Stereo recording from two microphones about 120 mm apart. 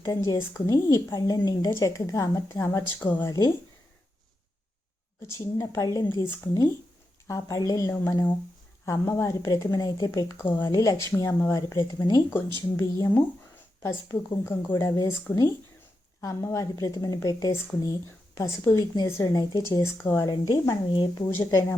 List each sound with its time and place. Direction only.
0.1 s a woman's voice: 30° left (ahead or behind)
5.5 s a woman's voice: 30° left (ahead or behind)
8.8 s speech: 20° left (ahead or behind)
10.3 s speech: 20° left (ahead or behind)
10.7 s a woman's voice: 30° left (ahead or behind)
14.8 s a woman's voice: 35° left (ahead or behind)
21.2 s speech: 20° left (ahead or behind)